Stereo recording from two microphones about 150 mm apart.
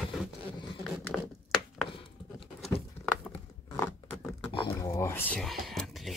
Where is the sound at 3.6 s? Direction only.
15° left (ahead or behind).